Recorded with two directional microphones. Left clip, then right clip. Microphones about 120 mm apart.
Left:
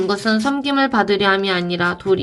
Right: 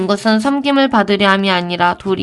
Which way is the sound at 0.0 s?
45° right (ahead or behind).